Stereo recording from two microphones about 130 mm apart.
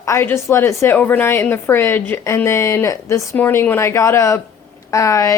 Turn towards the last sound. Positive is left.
turn(degrees=25)  # may be behind; listen again after turning